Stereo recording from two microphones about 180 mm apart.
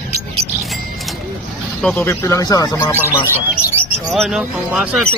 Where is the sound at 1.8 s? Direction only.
5° left (ahead or behind).